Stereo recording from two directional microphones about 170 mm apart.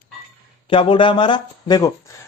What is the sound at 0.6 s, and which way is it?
Speech, 30° left (ahead or behind).